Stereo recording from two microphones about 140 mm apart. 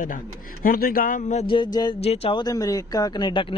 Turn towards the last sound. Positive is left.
turn(degrees=35)  # may be behind; listen again after turning